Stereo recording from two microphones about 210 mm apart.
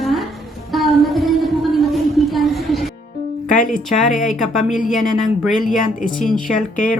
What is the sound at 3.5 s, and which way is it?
Speech, 40° left (ahead or behind).